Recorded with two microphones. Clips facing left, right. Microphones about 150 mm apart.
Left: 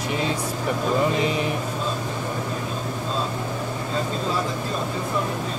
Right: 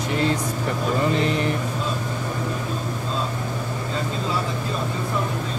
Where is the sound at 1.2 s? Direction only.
10° left (ahead or behind).